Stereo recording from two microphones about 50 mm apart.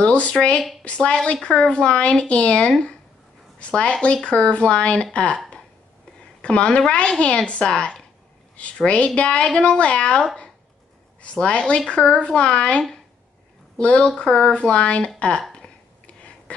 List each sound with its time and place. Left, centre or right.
0.0 s speech: left
6.4 s speech: left
11.2 s speech: left
16.2 s a sound: left